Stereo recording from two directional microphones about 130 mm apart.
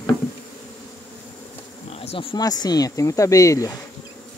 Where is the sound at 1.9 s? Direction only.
50° left (ahead or behind).